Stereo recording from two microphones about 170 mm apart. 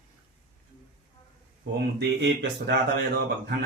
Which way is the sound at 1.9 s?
85° right.